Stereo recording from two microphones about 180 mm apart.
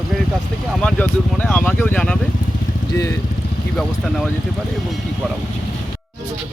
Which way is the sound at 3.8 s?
Centre (ahead or behind).